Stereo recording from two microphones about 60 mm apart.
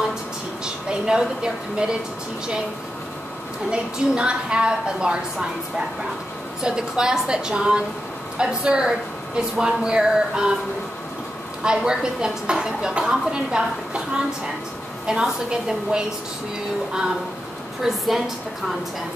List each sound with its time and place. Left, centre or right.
0.8 s speech: centre
3.7 s speech: centre
11.6 s speech: centre
15.0 s speech: centre
17.8 s a woman's voice: centre